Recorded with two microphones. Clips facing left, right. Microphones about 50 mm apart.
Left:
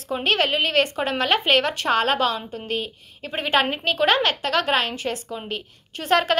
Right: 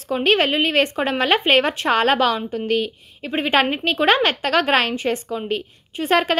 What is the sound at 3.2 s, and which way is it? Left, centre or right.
A woman's voice, right.